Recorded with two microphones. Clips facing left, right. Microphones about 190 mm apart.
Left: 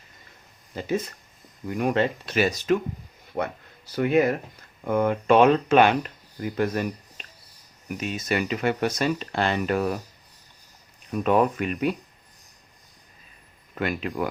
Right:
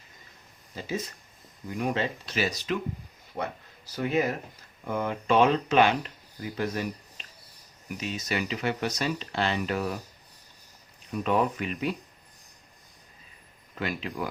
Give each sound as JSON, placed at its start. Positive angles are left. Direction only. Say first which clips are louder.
{"t": 0.8, "sound": "speech", "louder": "left 6 dB", "side_deg": 55}
{"t": 3.9, "sound": "speech", "louder": "left 6 dB", "side_deg": 60}
{"t": 11.1, "sound": "speech", "louder": "left 5 dB", "side_deg": 55}
{"t": 13.7, "sound": "speech", "louder": "left 5 dB", "side_deg": 55}